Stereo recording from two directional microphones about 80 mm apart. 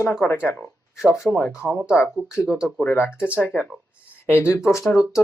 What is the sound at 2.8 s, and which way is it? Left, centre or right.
Speech, left.